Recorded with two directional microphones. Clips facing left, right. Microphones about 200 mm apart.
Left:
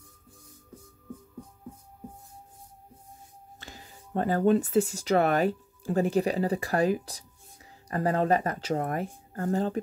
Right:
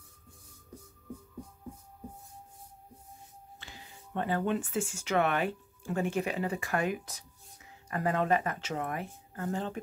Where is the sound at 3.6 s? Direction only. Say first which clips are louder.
Left 5 dB; 40° left (ahead or behind).